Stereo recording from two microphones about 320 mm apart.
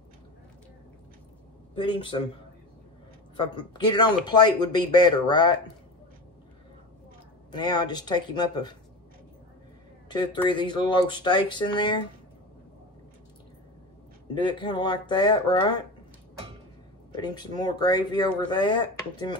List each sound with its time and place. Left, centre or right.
1.8 s speech: centre
3.3 s speech: centre
7.5 s speech: centre
10.0 s speech: centre
14.3 s speech: centre
17.2 s speech: centre